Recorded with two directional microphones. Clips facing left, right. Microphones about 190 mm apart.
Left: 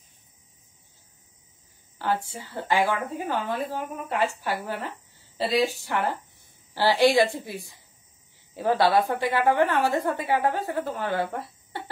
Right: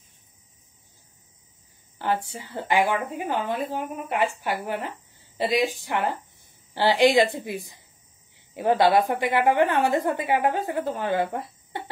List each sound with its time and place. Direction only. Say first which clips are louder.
2.0 s a woman's voice: right 1 dB; 20° right (ahead or behind)